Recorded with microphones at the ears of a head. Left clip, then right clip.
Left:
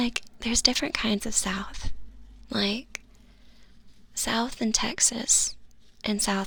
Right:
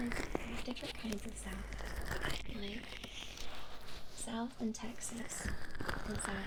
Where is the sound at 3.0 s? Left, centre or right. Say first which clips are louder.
Right 14 dB; right.